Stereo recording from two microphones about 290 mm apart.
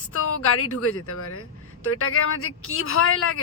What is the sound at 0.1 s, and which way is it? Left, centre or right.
A woman's voice, left.